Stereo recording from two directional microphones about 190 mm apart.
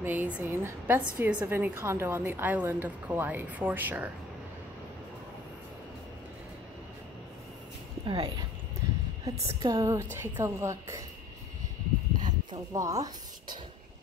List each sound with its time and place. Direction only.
0.0 s a woman's voice: 10° right (ahead or behind)
8.0 s a woman's voice: 25° right (ahead or behind)
12.3 s a woman's voice: 20° right (ahead or behind)